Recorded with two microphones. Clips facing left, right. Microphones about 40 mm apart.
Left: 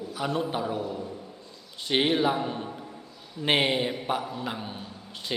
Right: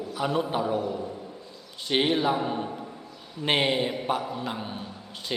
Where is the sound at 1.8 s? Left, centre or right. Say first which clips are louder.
Even; centre.